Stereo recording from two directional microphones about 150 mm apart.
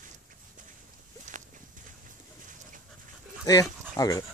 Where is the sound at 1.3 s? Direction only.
60° right (ahead or behind).